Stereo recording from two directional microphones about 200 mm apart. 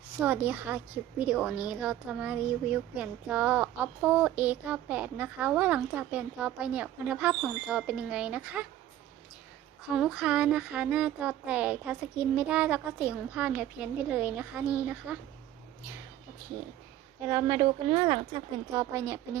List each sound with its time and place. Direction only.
0.2 s a woman's voice: 10° right (ahead or behind)
9.9 s speech: 5° right (ahead or behind)
17.2 s a woman's voice: 20° right (ahead or behind)
18.7 s a woman's voice: 15° right (ahead or behind)